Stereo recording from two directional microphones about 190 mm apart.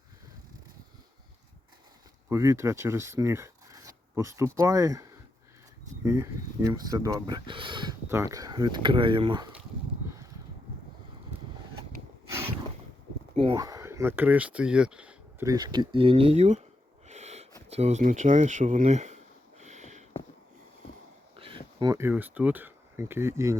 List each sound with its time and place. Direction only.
2.3 s speech: 15° right (ahead or behind)
6.1 s speech: 15° right (ahead or behind)
8.0 s speech: 15° right (ahead or behind)
13.3 s speech: 30° right (ahead or behind)
13.6 s speech: 15° right (ahead or behind)
15.4 s speech: 20° right (ahead or behind)
17.1 s sneeze: 35° right (ahead or behind)
17.7 s a sound: 35° right (ahead or behind)
21.3 s speech: 30° right (ahead or behind)